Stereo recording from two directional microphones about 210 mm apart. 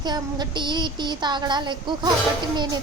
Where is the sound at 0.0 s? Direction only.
20° right (ahead or behind).